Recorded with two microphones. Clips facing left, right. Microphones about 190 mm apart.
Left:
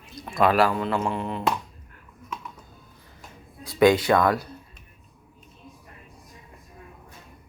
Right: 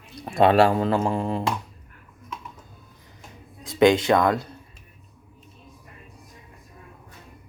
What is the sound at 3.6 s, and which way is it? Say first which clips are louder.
Speech: right 1 dB; 20° right (ahead or behind).